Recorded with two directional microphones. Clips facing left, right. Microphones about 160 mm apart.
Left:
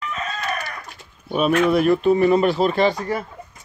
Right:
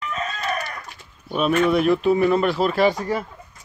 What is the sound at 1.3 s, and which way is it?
Speech, centre (ahead or behind).